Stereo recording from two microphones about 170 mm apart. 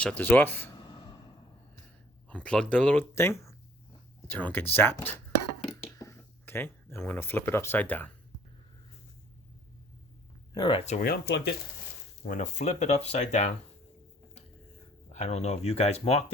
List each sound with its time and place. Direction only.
0.0 s speech: 10° left (ahead or behind)
0.8 s gasp: 25° left (ahead or behind)
2.3 s speech: 5° left (ahead or behind)
5.7 s a sound: 20° left (ahead or behind)
10.5 s speech: 30° left (ahead or behind)
11.0 s speech: 70° left (ahead or behind)
12.2 s speech: 50° left (ahead or behind)
15.1 s speech: 40° left (ahead or behind)